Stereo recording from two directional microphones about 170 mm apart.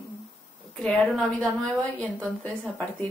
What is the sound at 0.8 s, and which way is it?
Speech, 5° left (ahead or behind).